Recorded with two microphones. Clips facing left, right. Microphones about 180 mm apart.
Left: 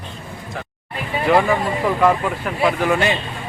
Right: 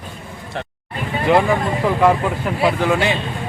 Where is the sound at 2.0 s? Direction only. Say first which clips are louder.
Right 2 dB; 15° right (ahead or behind).